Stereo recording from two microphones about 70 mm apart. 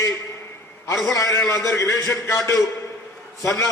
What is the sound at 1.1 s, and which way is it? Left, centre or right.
A man's voice, left.